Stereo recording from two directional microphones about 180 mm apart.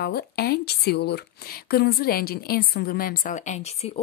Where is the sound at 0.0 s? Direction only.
60° left (ahead or behind).